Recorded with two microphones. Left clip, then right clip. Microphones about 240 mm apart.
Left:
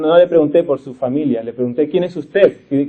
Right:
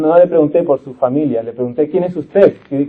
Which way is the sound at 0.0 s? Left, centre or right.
Left.